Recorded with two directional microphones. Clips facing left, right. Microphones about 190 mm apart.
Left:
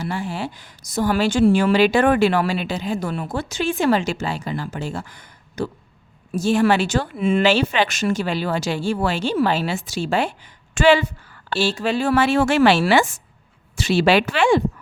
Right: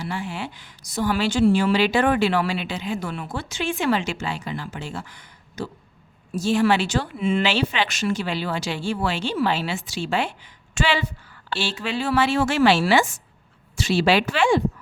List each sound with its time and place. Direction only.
0.0 s a woman's voice: 40° left (ahead or behind); by 14.6 s 60° left (ahead or behind)